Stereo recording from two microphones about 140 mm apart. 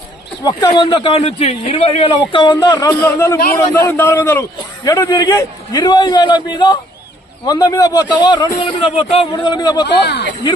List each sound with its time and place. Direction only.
0.4 s speech: 30° left (ahead or behind)
1.2 s speech: 55° left (ahead or behind)
2.5 s a man's voice: 25° left (ahead or behind)
8.9 s speech: 45° left (ahead or behind)
9.3 s a man's voice: 30° left (ahead or behind)